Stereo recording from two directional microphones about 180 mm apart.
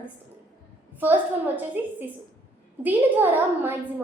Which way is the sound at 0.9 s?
10° right (ahead or behind).